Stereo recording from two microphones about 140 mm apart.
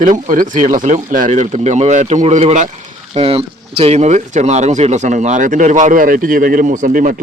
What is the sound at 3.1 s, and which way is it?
Speech, 45° right (ahead or behind).